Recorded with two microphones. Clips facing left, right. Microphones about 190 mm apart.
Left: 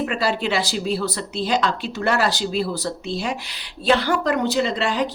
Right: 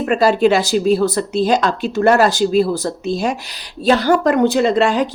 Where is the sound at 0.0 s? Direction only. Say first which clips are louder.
Right 9 dB; 45° right (ahead or behind).